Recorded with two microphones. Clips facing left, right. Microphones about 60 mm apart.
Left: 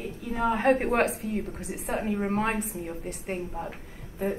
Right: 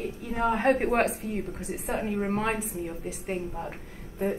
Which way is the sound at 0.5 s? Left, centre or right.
Centre.